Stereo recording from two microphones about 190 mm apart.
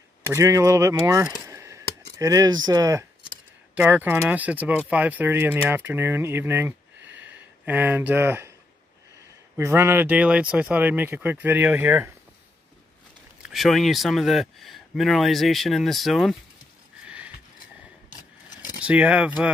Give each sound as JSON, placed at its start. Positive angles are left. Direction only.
{"t": 0.3, "sound": "speech", "side_deg": -15}
{"t": 1.4, "sound": "chop", "side_deg": -15}
{"t": 2.1, "sound": "speech", "side_deg": -20}
{"t": 7.2, "sound": "a sound", "side_deg": -10}
{"t": 9.6, "sound": "speech", "side_deg": -15}
{"t": 13.4, "sound": "speech", "side_deg": 0}
{"t": 17.0, "sound": "a sound", "side_deg": -5}
{"t": 18.8, "sound": "speech", "side_deg": -5}